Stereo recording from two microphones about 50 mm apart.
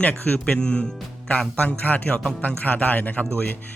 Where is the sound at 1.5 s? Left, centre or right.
Left.